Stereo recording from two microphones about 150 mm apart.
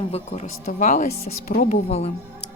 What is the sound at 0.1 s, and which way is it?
Speech, 50° left (ahead or behind).